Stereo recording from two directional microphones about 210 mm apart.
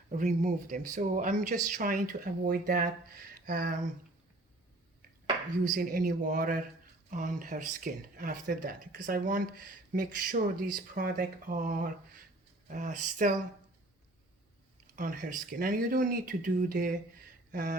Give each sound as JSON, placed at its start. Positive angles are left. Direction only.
{"t": 0.1, "sound": "speech", "side_deg": -35}
{"t": 5.7, "sound": "a man's voice", "side_deg": -45}
{"t": 14.9, "sound": "speech", "side_deg": -40}